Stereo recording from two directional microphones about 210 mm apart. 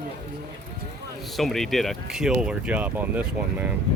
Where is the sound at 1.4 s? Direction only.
Centre (ahead or behind).